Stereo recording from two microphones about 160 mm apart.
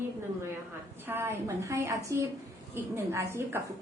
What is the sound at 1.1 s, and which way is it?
Speech, 15° right (ahead or behind).